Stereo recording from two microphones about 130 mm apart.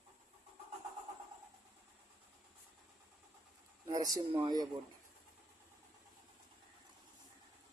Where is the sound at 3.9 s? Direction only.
30° right (ahead or behind).